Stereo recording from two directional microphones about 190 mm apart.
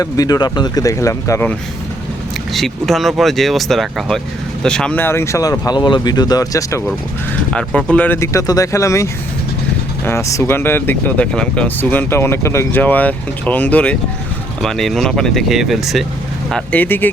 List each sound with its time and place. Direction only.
0.0 s speech: 20° left (ahead or behind)
2.5 s speech: centre (ahead or behind); by 6.8 s 15° left (ahead or behind)
7.5 s speech: 5° left (ahead or behind)